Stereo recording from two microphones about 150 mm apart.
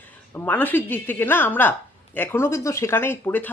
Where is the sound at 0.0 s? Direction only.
10° left (ahead or behind).